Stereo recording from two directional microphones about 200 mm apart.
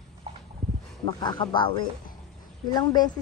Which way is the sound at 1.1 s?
20° left (ahead or behind).